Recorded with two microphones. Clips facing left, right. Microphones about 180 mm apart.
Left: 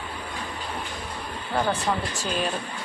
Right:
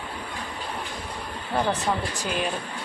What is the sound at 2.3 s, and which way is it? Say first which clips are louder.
Speech: left 1 dB; 10° right (ahead or behind).